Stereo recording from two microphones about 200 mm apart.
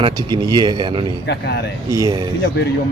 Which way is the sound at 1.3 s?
55° left (ahead or behind).